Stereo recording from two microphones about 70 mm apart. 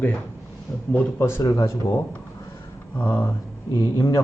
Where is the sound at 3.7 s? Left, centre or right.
Left.